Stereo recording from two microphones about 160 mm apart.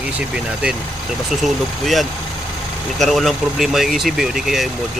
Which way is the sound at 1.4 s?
Centre (ahead or behind).